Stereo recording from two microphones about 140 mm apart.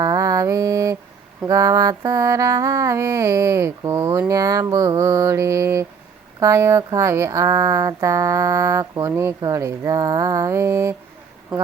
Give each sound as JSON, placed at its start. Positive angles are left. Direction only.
{"t": 0.0, "sound": "mantra", "side_deg": -25}